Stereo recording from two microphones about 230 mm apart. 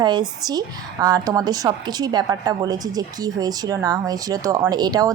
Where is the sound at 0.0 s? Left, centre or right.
Centre.